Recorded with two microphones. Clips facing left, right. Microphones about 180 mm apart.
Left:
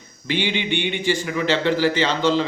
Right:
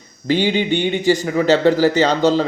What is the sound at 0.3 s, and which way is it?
A man's voice, 40° right (ahead or behind).